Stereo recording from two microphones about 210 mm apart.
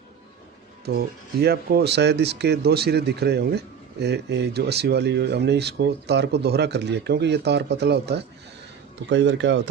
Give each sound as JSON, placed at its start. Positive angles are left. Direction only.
{"t": 0.9, "sound": "speech", "side_deg": -50}